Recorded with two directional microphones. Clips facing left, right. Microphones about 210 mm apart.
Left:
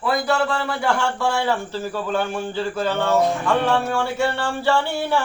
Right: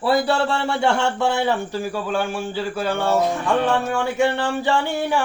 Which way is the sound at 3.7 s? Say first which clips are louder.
Even; 15° right (ahead or behind).